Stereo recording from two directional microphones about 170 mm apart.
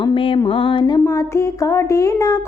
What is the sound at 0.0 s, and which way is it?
Speech, 30° left (ahead or behind).